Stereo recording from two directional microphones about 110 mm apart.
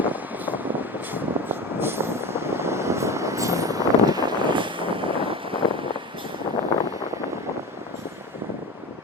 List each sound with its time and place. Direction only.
0.0 s vehicle: 15° right (ahead or behind); by 5.8 s 55° right (ahead or behind)